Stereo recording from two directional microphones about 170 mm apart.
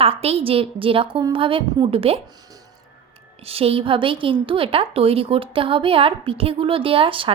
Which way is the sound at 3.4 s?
35° right (ahead or behind).